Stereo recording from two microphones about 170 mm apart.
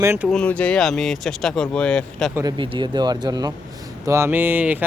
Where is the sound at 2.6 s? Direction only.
25° right (ahead or behind).